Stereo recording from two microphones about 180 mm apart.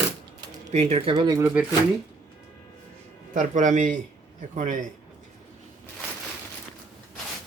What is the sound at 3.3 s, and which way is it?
A man's voice, 45° right (ahead or behind).